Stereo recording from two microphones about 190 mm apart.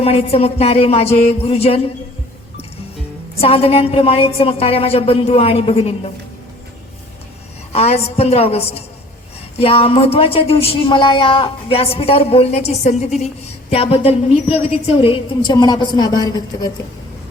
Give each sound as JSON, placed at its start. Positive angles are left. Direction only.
{"t": 0.0, "sound": "speech", "side_deg": 30}
{"t": 3.4, "sound": "speech", "side_deg": 30}
{"t": 7.7, "sound": "a woman's voice", "side_deg": 35}